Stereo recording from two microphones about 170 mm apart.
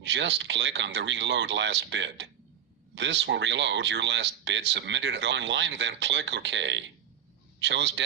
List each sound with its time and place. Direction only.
0.0 s speech: 90° right